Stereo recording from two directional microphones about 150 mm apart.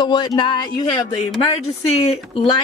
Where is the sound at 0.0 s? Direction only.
30° left (ahead or behind).